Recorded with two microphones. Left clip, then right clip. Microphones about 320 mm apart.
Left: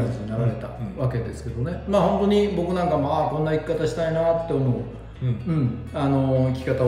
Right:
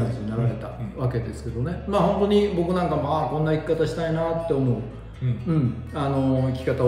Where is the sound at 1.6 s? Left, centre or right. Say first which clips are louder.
Left 1 dB; centre.